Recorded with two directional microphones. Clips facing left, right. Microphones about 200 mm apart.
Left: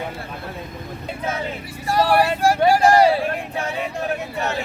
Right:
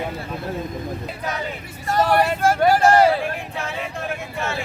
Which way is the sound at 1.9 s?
10° left (ahead or behind).